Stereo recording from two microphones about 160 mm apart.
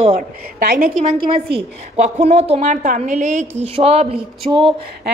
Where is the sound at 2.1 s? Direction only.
40° right (ahead or behind).